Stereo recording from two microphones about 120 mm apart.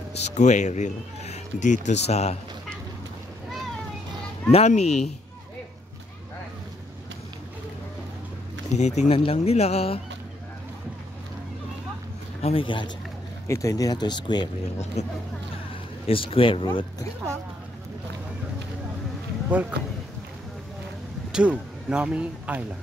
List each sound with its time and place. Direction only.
0.2 s speech: 75° left (ahead or behind)
4.5 s a man's voice: 65° left (ahead or behind)
8.7 s speech: 75° left (ahead or behind)
9.2 s a man's voice: 55° left (ahead or behind)
12.4 s speech: 60° left (ahead or behind)
12.6 s a man's voice: 40° left (ahead or behind)
13.5 s speech: 25° left (ahead or behind)
15.0 s speech: 65° left (ahead or behind)
15.7 s speech: 50° left (ahead or behind)
19.5 s speech: 10° right (ahead or behind)
21.3 s speech: 10° right (ahead or behind)